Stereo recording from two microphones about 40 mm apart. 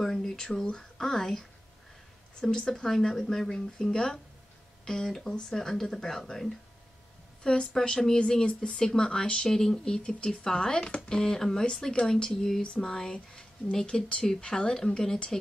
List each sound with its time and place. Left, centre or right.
0.0 s speech: centre
2.5 s speech: centre
7.4 s speech: left